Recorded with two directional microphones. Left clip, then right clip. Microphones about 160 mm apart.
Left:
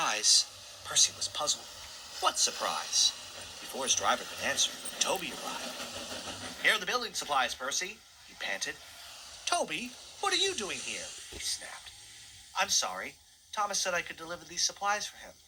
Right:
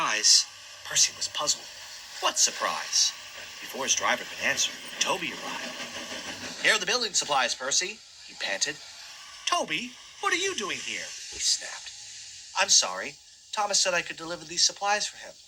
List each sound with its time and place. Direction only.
0.0 s a sound: 5° right (ahead or behind)
0.9 s speech: 10° right (ahead or behind)
6.6 s speech: 45° right (ahead or behind)
9.4 s speech: 5° right (ahead or behind)
11.3 s speech: 45° right (ahead or behind)